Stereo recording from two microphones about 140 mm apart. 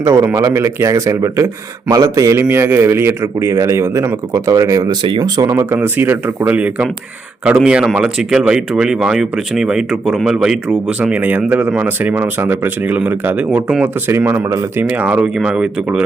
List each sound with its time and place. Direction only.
0.0 s a man's voice: 20° right (ahead or behind); by 16.0 s 5° right (ahead or behind)